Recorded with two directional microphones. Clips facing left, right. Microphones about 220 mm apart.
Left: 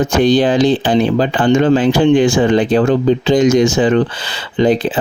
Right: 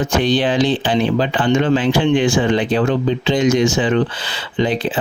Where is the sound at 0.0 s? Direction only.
40° left (ahead or behind).